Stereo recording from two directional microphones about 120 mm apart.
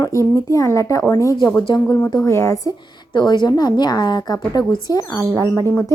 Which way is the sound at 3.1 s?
35° left (ahead or behind).